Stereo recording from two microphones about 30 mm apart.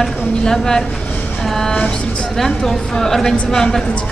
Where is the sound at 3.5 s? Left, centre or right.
Centre.